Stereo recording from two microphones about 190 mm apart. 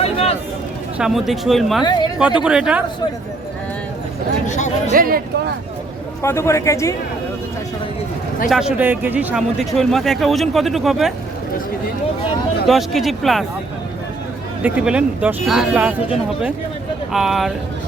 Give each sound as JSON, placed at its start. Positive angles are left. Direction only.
{"t": 0.0, "sound": "a sound", "side_deg": 30}
{"t": 0.9, "sound": "speech", "side_deg": -5}
{"t": 4.4, "sound": "speech", "side_deg": 40}
{"t": 4.9, "sound": "speech", "side_deg": -50}
{"t": 6.2, "sound": "speech", "side_deg": 15}
{"t": 8.4, "sound": "speech", "side_deg": -5}
{"t": 12.6, "sound": "speech", "side_deg": 0}
{"t": 14.6, "sound": "speech", "side_deg": -5}
{"t": 17.1, "sound": "speech", "side_deg": 0}